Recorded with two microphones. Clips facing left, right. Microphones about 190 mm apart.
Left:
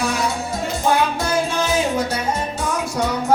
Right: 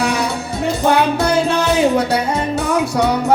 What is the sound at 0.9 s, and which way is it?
Music, 65° right (ahead or behind).